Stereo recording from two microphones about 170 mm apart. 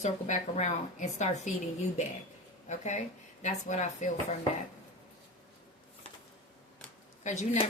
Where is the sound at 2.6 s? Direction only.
45° left (ahead or behind).